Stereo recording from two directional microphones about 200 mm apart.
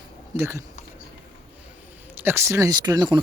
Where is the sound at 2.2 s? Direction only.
15° right (ahead or behind).